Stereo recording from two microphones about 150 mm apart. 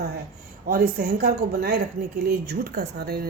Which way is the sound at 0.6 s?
90° right.